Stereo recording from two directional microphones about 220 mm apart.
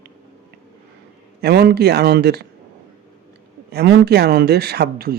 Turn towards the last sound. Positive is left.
turn(degrees=-45)  # may be behind; listen again after turning